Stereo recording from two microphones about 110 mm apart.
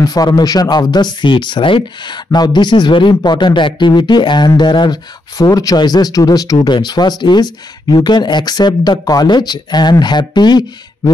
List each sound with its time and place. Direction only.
0.0 s speech: 35° left (ahead or behind)